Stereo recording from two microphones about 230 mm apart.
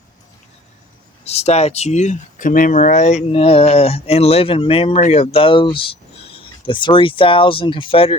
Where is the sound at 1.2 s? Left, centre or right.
Left.